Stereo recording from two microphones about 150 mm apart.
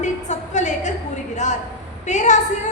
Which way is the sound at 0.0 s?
50° left (ahead or behind).